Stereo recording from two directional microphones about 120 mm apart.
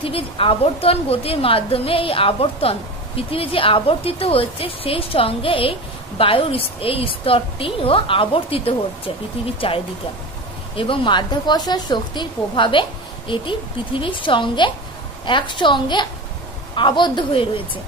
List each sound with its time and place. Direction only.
0.0 s a woman's voice: 50° left (ahead or behind)